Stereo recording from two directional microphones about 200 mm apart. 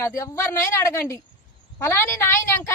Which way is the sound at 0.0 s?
15° left (ahead or behind).